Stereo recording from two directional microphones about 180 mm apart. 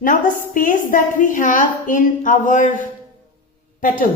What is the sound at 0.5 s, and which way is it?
A woman's voice, 45° left (ahead or behind).